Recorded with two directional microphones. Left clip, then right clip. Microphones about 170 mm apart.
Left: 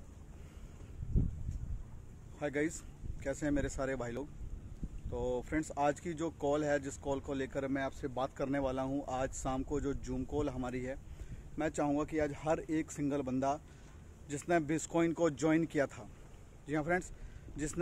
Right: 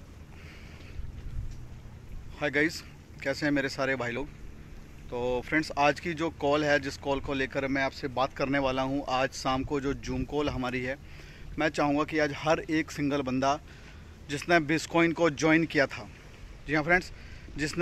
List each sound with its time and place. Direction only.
2.3 s speech: 15° right (ahead or behind)